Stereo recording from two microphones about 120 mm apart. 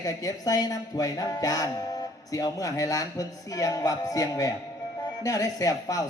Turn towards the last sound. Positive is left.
turn(degrees=30)  # may be behind; listen again after turning